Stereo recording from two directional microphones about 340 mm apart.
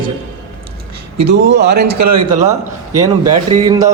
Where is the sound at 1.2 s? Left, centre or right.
Right.